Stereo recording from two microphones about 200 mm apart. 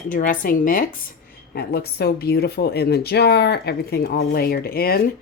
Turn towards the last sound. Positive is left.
turn(degrees=50)  # may be behind; listen again after turning